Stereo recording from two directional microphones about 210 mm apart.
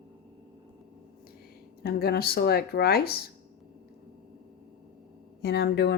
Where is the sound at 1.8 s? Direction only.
50° left (ahead or behind).